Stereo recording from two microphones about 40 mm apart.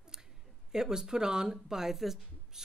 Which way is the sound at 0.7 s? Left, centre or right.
Centre.